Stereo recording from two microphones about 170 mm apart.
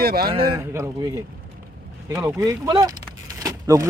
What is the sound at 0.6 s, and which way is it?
Speech, 15° right (ahead or behind).